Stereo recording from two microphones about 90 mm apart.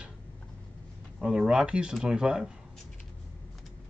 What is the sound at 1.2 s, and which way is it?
Speech, 10° right (ahead or behind).